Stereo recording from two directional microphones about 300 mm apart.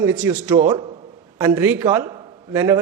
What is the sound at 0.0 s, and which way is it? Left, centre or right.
A man's voice, centre.